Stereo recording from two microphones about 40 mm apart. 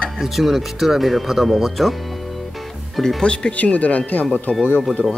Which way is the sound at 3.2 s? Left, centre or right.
Left.